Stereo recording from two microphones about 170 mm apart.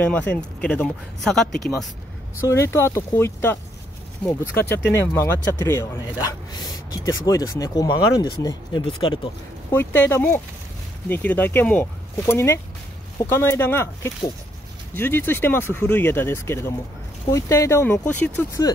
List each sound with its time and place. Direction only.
0.0 s speech: 10° left (ahead or behind)
2.4 s speech: 15° left (ahead or behind)
9.7 s speech: 15° left (ahead or behind)